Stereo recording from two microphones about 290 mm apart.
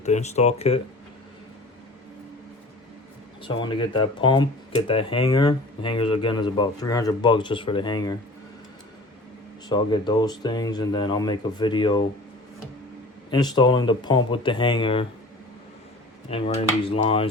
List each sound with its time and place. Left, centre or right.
0.0 s speech: left
3.4 s speech: centre
9.6 s speech: centre
13.3 s speech: centre
16.3 s speech: centre